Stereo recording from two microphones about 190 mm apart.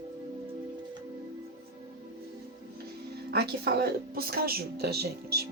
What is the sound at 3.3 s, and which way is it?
A woman's voice, 60° right (ahead or behind).